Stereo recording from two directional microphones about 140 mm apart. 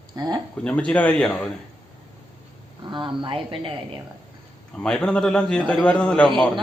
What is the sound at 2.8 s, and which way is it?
Speech, 35° right (ahead or behind).